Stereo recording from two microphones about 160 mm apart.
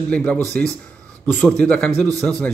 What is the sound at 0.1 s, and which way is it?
Speech, 10° left (ahead or behind).